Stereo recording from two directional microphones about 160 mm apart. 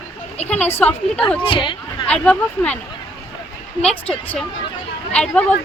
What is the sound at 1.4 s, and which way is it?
Speech, 30° left (ahead or behind).